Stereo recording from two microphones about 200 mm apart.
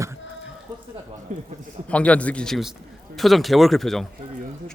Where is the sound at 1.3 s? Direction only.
35° right (ahead or behind).